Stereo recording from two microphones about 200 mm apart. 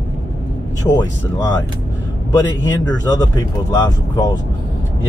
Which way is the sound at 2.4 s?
15° left (ahead or behind).